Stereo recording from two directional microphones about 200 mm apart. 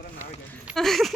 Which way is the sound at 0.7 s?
Centre (ahead or behind).